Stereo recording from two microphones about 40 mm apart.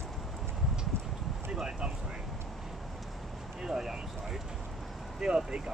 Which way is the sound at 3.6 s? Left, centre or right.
Centre.